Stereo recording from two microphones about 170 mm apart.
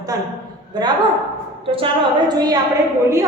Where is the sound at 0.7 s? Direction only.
25° right (ahead or behind).